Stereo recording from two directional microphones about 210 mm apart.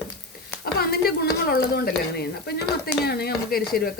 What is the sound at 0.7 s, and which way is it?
A woman's voice, 45° left (ahead or behind).